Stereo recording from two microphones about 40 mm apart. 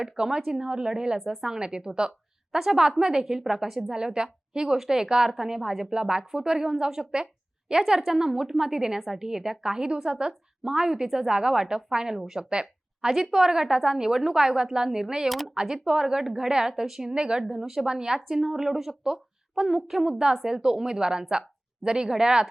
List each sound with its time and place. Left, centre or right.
0.0 s a woman's voice: centre
13.1 s a woman's voice: centre
17.2 s speech: right
17.5 s a woman's voice: centre
20.1 s a woman's voice: centre